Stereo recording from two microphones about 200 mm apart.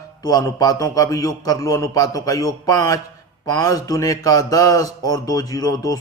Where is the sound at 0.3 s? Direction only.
20° left (ahead or behind).